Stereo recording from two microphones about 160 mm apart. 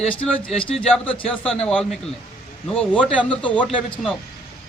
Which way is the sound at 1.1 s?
35° left (ahead or behind).